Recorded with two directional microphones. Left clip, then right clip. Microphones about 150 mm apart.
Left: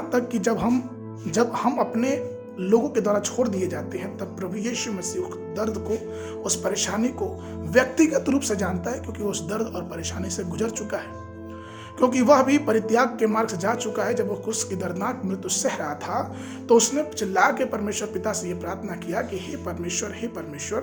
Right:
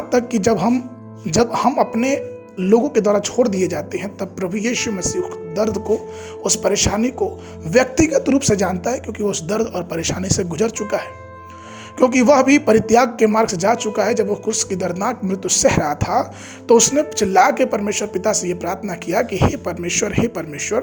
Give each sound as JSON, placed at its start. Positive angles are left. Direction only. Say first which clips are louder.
{"t": 0.1, "sound": "speech", "louder": "right 7 dB", "side_deg": -35}